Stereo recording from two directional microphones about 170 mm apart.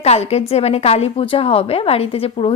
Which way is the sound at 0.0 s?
40° left (ahead or behind).